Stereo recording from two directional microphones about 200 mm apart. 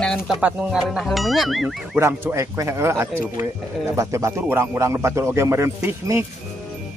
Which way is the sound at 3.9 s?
15° right (ahead or behind).